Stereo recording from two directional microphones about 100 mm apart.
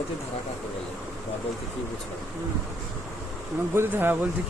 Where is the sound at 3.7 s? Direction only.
20° right (ahead or behind).